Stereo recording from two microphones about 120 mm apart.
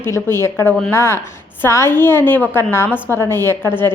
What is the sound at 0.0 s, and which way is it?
A woman's voice, 20° left (ahead or behind).